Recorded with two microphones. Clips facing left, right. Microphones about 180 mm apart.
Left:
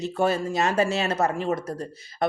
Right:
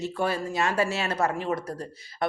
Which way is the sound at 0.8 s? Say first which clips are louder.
Left 4 dB; 20° left (ahead or behind).